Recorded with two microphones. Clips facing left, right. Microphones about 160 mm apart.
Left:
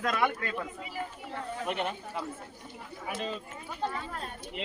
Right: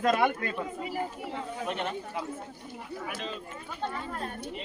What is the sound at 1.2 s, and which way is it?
Speech, 15° right (ahead or behind).